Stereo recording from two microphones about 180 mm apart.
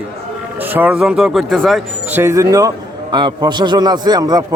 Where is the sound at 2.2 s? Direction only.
15° right (ahead or behind).